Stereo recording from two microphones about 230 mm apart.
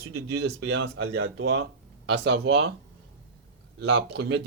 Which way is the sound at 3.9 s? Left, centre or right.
Right.